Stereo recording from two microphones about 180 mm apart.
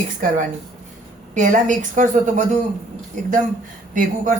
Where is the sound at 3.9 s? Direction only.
50° right (ahead or behind).